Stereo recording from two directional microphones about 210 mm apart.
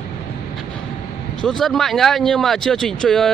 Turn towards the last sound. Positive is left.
turn(degrees=0)  # may be behind; listen again after turning